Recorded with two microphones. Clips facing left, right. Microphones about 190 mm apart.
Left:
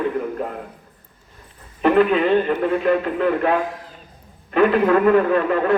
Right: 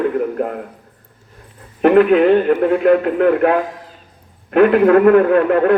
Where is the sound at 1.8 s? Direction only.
60° right (ahead or behind).